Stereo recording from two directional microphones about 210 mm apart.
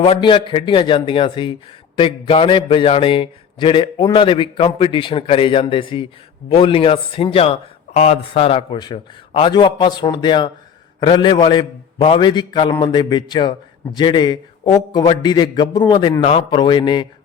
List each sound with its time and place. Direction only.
0.0 s a man's voice: 25° left (ahead or behind)